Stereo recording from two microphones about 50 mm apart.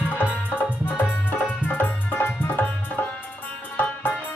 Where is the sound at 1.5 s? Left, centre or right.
Left.